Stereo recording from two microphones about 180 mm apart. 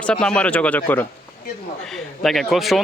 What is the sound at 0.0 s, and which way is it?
Speech, 5° left (ahead or behind).